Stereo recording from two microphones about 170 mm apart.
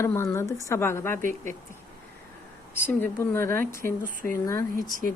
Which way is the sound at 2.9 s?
10° left (ahead or behind).